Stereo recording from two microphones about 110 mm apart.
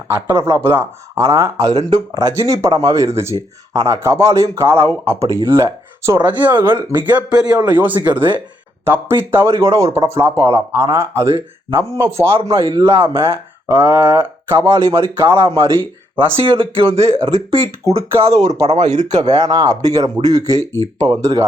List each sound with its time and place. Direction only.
0.1 s speech: 20° right (ahead or behind)
12.7 s speech: 50° right (ahead or behind)
13.1 s speech: 25° right (ahead or behind)
16.1 s speech: 50° right (ahead or behind)
18.2 s speech: 30° right (ahead or behind)
18.6 s speech: 75° right (ahead or behind)
18.9 s speech: 40° right (ahead or behind)